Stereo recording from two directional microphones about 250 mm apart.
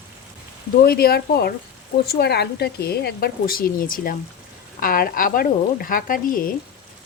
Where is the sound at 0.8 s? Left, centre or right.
Left.